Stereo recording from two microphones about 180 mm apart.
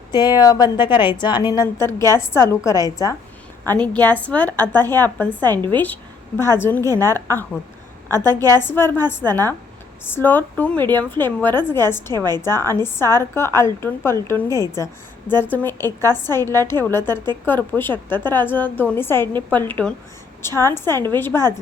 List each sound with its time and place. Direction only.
0.1 s a woman's voice: 25° left (ahead or behind)
1.5 s a woman's voice: 15° left (ahead or behind)
4.0 s a woman's voice: 10° left (ahead or behind)
6.8 s a woman's voice: 20° right (ahead or behind)
8.1 s a woman's voice: 20° right (ahead or behind)
8.5 s a woman's voice: 10° left (ahead or behind)
12.1 s a woman's voice: 20° right (ahead or behind)
12.5 s a woman's voice: 15° left (ahead or behind)